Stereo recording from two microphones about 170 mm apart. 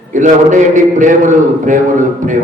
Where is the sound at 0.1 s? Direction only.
45° right (ahead or behind).